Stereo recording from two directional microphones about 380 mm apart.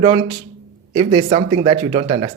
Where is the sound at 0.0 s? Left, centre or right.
Centre.